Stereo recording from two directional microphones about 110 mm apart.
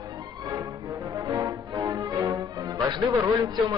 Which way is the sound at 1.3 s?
30° right (ahead or behind).